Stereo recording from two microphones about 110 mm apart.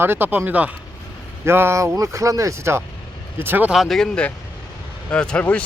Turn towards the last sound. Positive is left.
turn(degrees=10)  # may be behind; listen again after turning